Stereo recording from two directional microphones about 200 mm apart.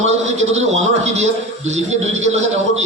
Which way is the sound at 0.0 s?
35° right (ahead or behind).